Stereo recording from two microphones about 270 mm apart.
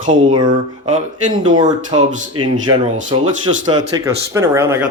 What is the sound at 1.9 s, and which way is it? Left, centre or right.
Speech, right.